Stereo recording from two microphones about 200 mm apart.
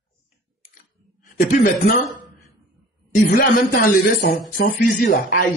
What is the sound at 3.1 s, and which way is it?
Speech, 45° left (ahead or behind).